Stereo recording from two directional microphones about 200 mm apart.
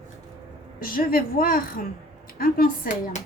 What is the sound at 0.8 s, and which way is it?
A woman's voice, 45° left (ahead or behind).